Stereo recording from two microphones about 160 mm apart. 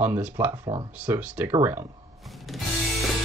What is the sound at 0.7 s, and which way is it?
Speech, 25° right (ahead or behind).